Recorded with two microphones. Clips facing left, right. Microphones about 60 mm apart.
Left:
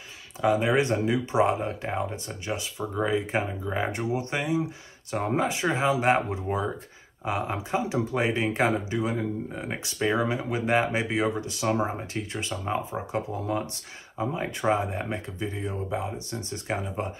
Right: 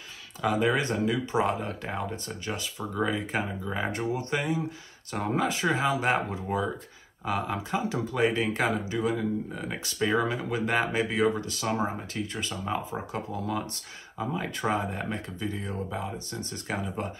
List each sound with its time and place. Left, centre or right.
0.7 s speech: left
9.9 s speech: centre
16.3 s speech: right
16.7 s speech: centre